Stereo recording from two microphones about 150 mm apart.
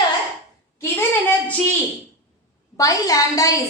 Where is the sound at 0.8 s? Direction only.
15° left (ahead or behind).